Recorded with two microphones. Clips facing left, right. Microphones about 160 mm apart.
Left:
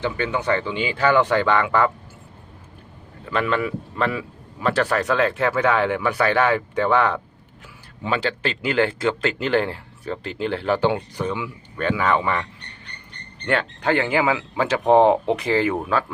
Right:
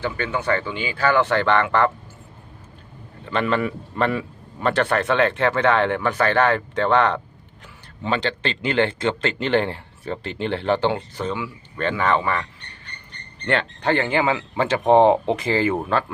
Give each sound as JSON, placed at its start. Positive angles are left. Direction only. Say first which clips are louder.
{"t": 0.0, "sound": "speech", "louder": "left 1 dB", "side_deg": 15}
{"t": 3.2, "sound": "speech", "louder": "right 1 dB", "side_deg": 0}
{"t": 13.4, "sound": "speech", "louder": "even", "side_deg": 5}